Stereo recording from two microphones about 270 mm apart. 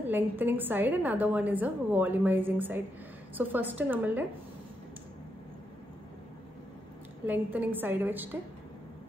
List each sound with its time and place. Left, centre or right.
0.0 s a woman's voice: centre
7.2 s a woman's voice: centre